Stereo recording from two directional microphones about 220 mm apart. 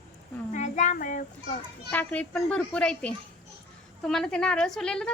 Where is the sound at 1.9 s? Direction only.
10° left (ahead or behind).